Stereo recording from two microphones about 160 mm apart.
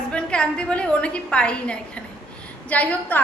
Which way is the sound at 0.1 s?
5° left (ahead or behind).